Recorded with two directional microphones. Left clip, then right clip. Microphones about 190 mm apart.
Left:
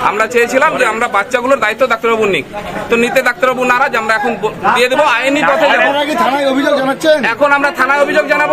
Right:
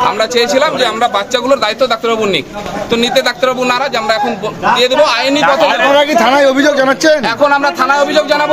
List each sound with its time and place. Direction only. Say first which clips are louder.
0.2 s a man's voice: even; 10° right (ahead or behind)
5.4 s a man's voice: right 1 dB; 40° right (ahead or behind)
7.2 s a man's voice: even; centre (ahead or behind)